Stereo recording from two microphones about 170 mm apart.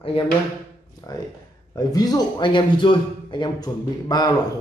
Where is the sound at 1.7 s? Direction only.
20° left (ahead or behind).